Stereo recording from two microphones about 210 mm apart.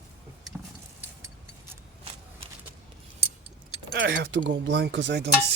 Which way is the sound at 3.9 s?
55° right (ahead or behind).